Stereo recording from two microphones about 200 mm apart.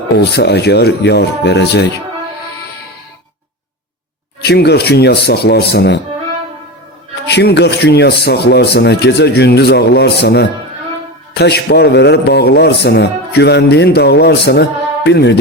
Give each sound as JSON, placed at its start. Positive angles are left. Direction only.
{"t": 0.2, "sound": "a man's voice", "side_deg": 55}
{"t": 4.4, "sound": "a man's voice", "side_deg": 55}
{"t": 7.3, "sound": "a man's voice", "side_deg": 55}